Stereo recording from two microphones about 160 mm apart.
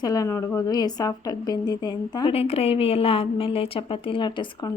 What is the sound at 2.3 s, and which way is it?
A woman's voice, 40° left (ahead or behind).